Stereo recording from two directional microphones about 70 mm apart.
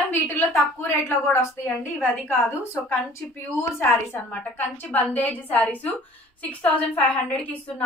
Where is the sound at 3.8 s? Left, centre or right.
Left.